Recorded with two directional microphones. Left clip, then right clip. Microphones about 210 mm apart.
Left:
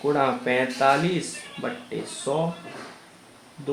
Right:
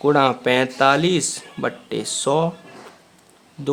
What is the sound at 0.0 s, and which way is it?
Speech, 40° right (ahead or behind).